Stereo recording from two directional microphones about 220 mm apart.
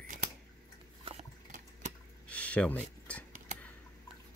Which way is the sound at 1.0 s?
30° right (ahead or behind).